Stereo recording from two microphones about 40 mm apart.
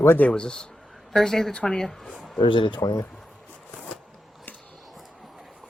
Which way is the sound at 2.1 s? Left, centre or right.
Centre.